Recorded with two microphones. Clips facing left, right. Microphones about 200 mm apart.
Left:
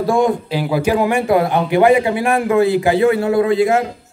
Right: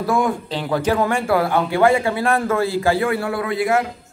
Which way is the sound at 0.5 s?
10° left (ahead or behind).